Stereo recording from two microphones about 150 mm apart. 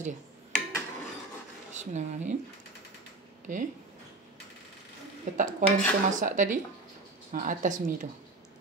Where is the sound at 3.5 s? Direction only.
60° right (ahead or behind).